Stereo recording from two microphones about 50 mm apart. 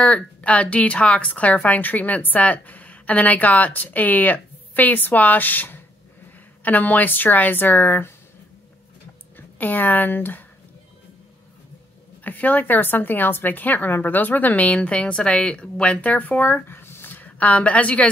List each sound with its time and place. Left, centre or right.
0.0 s a woman's voice: left
9.6 s a woman's voice: left
12.2 s a woman's voice: left